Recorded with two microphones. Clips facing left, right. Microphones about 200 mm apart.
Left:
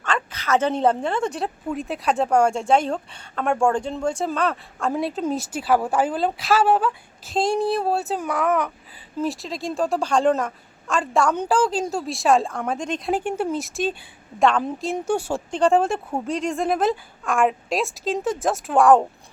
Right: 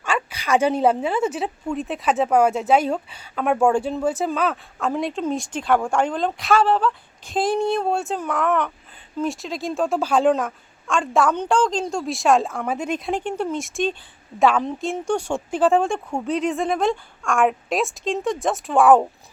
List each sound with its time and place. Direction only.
0.0 s a woman's voice: 10° right (ahead or behind); by 7.3 s 10° left (ahead or behind)
7.3 s a woman's voice: 5° right (ahead or behind)
13.1 s a woman's voice: 5° left (ahead or behind)
15.4 s a woman's voice: 5° right (ahead or behind)